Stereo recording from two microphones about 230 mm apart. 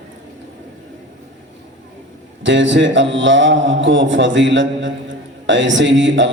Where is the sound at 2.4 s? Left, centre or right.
Right.